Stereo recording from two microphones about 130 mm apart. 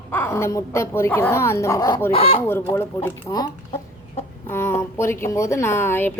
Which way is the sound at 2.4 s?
15° left (ahead or behind).